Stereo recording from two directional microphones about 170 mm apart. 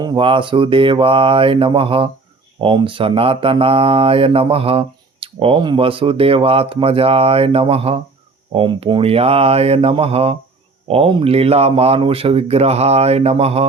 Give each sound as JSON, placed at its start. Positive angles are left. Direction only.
{"t": 0.0, "sound": "speech", "side_deg": -30}